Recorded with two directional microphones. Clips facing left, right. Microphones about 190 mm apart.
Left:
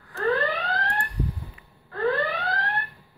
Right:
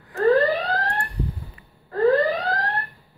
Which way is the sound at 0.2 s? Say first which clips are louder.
Right 7 dB; 35° right (ahead or behind).